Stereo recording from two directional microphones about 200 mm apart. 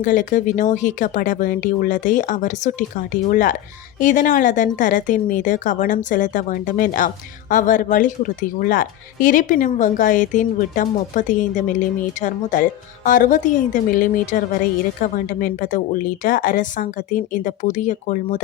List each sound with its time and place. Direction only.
0.0 s a woman's voice: 40° left (ahead or behind)